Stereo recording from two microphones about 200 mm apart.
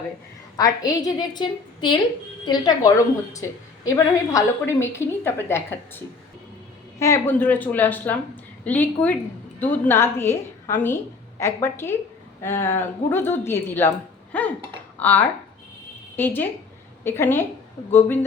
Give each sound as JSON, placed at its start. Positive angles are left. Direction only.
{"t": 0.5, "sound": "a woman's voice", "side_deg": 20}
{"t": 7.0, "sound": "a woman's voice", "side_deg": 10}
{"t": 14.9, "sound": "a woman's voice", "side_deg": 10}